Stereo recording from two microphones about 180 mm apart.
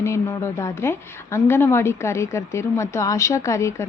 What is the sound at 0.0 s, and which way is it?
A woman's voice, 15° left (ahead or behind).